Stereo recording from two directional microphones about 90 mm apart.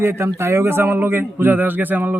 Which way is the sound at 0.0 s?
25° right (ahead or behind).